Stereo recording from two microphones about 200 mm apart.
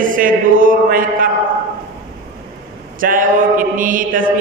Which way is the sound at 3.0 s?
45° right (ahead or behind).